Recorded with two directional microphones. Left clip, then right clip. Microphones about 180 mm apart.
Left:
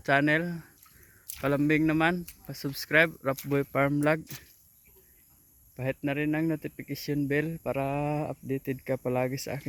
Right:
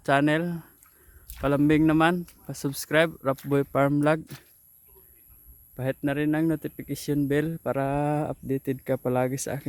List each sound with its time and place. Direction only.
0.0 s speech: 20° right (ahead or behind)
5.7 s speech: 20° right (ahead or behind)